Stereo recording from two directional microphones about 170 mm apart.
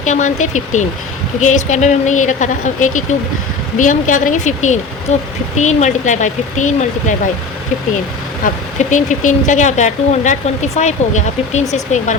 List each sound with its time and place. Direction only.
0.0 s speech: 45° left (ahead or behind)
8.9 s speech: 45° left (ahead or behind)